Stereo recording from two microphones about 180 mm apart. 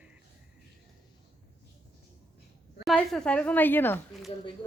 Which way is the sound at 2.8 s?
5° left (ahead or behind).